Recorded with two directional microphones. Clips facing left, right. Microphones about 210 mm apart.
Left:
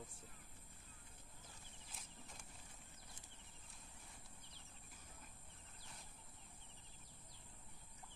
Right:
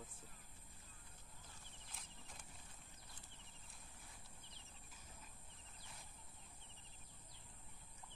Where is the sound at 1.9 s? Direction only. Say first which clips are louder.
Left 1 dB; centre (ahead or behind).